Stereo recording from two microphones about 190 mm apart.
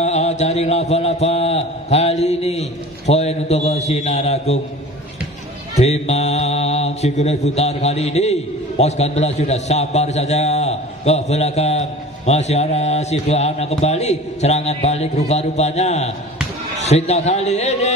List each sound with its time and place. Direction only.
0.0 s a man's voice: 35° left (ahead or behind)
5.8 s mantra: 35° left (ahead or behind)